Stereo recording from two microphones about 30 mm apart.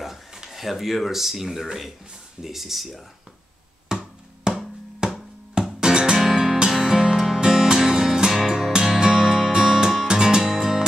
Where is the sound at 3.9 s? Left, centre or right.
Right.